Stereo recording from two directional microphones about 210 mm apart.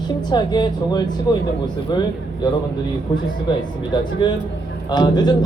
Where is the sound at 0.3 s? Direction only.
20° left (ahead or behind).